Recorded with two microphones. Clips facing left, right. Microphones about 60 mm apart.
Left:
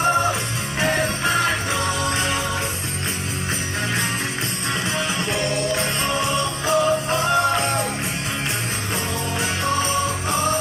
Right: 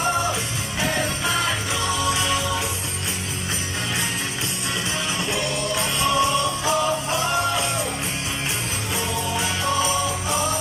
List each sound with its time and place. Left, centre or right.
0.7 s music: left
6.6 s music: left
9.8 s music: left